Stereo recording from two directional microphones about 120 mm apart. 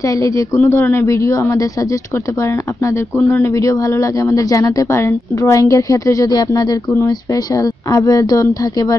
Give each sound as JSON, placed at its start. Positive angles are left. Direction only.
{"t": 0.0, "sound": "speech", "side_deg": 30}
{"t": 0.6, "sound": "speech", "side_deg": 15}